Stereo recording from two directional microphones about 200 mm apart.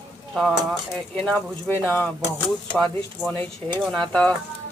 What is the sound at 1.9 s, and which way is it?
Speech, 10° left (ahead or behind).